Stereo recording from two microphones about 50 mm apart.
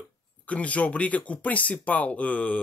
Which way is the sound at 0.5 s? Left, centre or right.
Left.